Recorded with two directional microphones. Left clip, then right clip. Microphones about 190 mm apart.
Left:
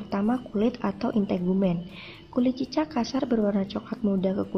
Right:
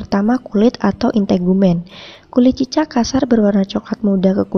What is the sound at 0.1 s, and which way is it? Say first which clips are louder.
A woman's voice: right 11 dB; 40° right (ahead or behind).